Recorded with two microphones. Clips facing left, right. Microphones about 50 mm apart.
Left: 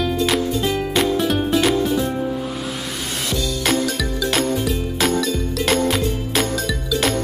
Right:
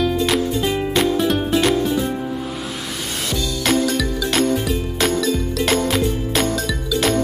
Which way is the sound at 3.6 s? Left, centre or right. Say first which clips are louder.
Right 3 dB; centre.